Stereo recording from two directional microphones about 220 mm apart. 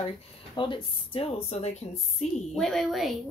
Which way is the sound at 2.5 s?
Centre (ahead or behind).